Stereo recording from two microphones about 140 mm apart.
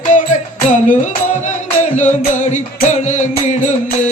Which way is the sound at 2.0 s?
60° left (ahead or behind).